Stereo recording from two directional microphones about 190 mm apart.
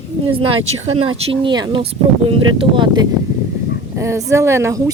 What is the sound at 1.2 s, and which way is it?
A woman's voice, 25° right (ahead or behind).